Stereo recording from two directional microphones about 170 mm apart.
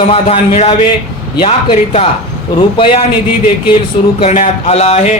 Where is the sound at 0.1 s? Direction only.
35° left (ahead or behind).